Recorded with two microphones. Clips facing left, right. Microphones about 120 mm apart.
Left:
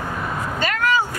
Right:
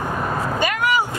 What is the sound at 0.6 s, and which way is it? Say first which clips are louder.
Vehicle: left 1 dB; 15° right (ahead or behind).